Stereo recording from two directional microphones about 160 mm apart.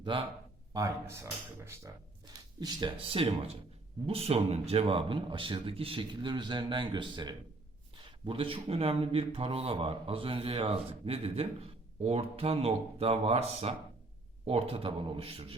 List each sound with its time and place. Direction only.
0.0 s speech: 30° right (ahead or behind)
0.7 s speech: 20° right (ahead or behind)
3.0 s a man's voice: 35° right (ahead or behind)